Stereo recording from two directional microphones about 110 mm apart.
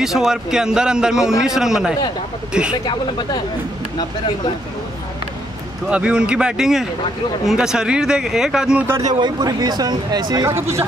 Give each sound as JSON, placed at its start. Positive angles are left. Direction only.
{"t": 0.0, "sound": "speech", "side_deg": -5}
{"t": 2.7, "sound": "speech", "side_deg": 45}
{"t": 5.9, "sound": "speech", "side_deg": -10}
{"t": 9.2, "sound": "speech", "side_deg": -35}
{"t": 10.4, "sound": "speech", "side_deg": -25}